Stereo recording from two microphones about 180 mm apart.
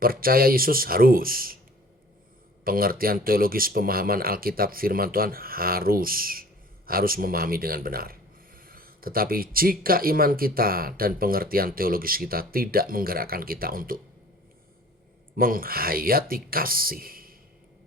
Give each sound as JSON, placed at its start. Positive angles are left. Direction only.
{"t": 0.0, "sound": "speech", "side_deg": -55}
{"t": 2.6, "sound": "speech", "side_deg": -55}
{"t": 15.4, "sound": "speech", "side_deg": -55}